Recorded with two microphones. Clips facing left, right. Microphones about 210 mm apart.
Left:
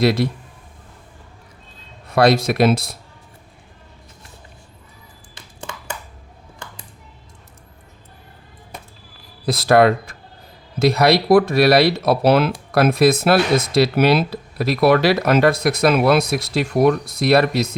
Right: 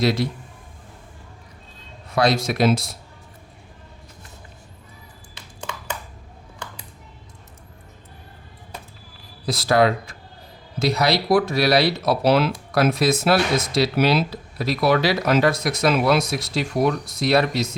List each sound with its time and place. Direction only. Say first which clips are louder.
0.0 s speech: left 4 dB; 60° left (ahead or behind)
2.1 s speech: left 5 dB; 60° left (ahead or behind)
9.5 s speech: left 4 dB; 55° left (ahead or behind)